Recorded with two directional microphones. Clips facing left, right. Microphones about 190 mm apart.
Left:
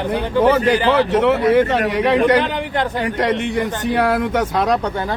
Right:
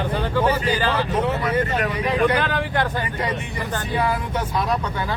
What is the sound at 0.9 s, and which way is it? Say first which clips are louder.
Speech: left 7 dB; 80° left.